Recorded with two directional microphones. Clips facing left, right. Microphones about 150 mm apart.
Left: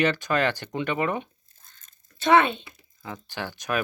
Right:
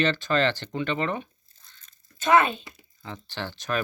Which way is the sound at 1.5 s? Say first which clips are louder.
Even; 45° left (ahead or behind).